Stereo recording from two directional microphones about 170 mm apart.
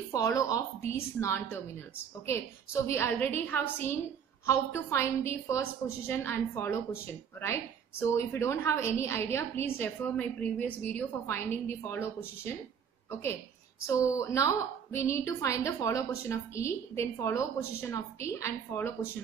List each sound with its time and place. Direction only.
0.1 s a woman's voice: 20° left (ahead or behind)